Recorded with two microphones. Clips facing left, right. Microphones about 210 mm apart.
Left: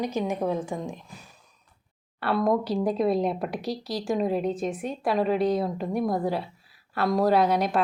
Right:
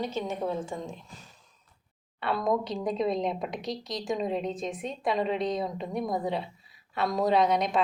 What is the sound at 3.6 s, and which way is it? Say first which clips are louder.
Speech: left 3 dB; 35° left (ahead or behind).